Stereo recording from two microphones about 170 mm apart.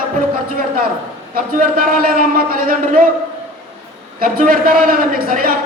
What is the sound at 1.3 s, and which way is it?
A man's voice, 55° right (ahead or behind).